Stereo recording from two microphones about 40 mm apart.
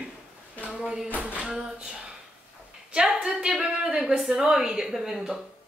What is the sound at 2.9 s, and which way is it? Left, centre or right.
A woman's voice, centre.